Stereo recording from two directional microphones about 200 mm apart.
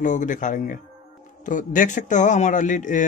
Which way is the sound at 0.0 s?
40° left (ahead or behind).